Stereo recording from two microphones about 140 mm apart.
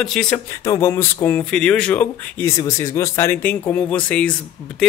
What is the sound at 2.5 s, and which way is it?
Speech, 25° left (ahead or behind).